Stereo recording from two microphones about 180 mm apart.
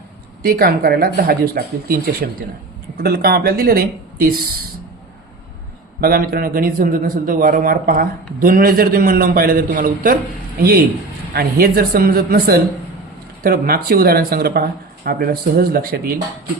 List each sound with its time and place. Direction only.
0.4 s speech: 55° right (ahead or behind)
6.0 s a man's voice: 55° right (ahead or behind)